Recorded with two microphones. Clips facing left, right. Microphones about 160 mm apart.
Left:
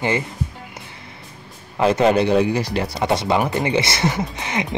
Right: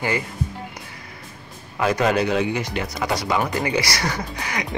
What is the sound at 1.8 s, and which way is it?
Speech, 25° left (ahead or behind).